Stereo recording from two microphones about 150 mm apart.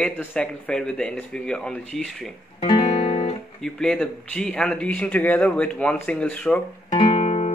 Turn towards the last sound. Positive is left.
turn(degrees=40)  # may be behind; listen again after turning